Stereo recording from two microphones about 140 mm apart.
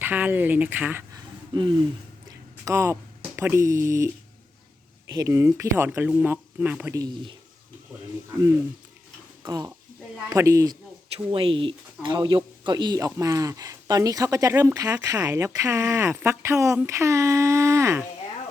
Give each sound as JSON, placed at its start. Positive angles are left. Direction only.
{"t": 0.0, "sound": "speech", "side_deg": -15}
{"t": 1.1, "sound": "a sound", "side_deg": -35}
{"t": 2.6, "sound": "speech", "side_deg": -20}
{"t": 6.9, "sound": "speech", "side_deg": -30}
{"t": 9.4, "sound": "speech", "side_deg": -20}
{"t": 11.3, "sound": "speech", "side_deg": -40}